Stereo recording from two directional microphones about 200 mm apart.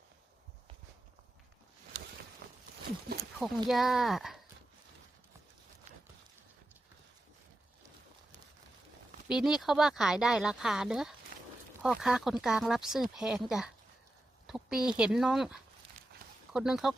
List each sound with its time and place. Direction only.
2.4 s a sound: 45° right (ahead or behind)
3.4 s speech: centre (ahead or behind)
9.3 s speech: centre (ahead or behind)